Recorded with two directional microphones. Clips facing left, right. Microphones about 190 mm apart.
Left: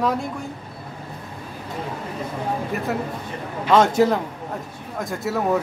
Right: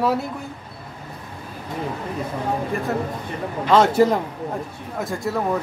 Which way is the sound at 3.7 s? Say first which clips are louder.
Right 1 dB; centre (ahead or behind).